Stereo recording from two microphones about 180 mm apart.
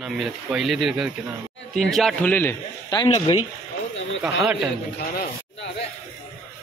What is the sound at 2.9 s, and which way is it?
Speech, 25° left (ahead or behind).